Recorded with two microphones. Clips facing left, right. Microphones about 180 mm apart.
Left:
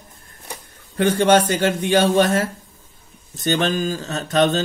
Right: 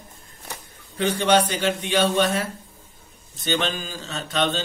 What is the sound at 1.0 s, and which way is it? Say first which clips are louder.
Speech: left 4 dB; 50° left (ahead or behind).